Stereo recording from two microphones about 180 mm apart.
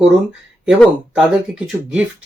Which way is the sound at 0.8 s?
Centre (ahead or behind).